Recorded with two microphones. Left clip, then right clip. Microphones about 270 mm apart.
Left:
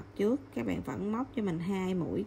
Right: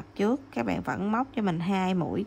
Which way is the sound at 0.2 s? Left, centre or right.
Right.